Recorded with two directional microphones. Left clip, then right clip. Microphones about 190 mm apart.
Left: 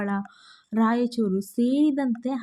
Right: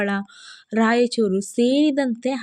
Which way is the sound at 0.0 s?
25° right (ahead or behind).